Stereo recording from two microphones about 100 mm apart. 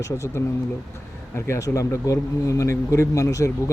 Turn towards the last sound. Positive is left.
turn(degrees=30)  # may be behind; listen again after turning